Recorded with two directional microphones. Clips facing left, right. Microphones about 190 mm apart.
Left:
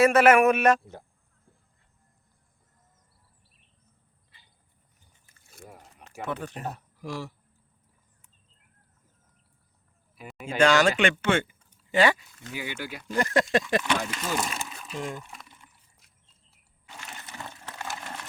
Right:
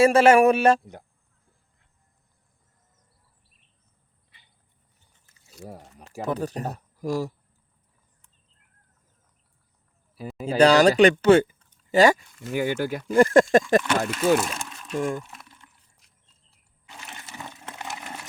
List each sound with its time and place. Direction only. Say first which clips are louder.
0.0 s a man's voice: right 3 dB; 30° right (ahead or behind)
5.3 s a sound: right 5 dB; 55° left (ahead or behind)
5.6 s speech: right 7 dB; 35° right (ahead or behind)
10.4 s speech: right 5 dB; 35° right (ahead or behind)
14.3 s speech: right 5 dB; centre (ahead or behind)
14.9 s speech: right 8 dB; 50° right (ahead or behind)
15.2 s a sound: right 1 dB; centre (ahead or behind)
17.7 s wood: right 1 dB; 20° right (ahead or behind)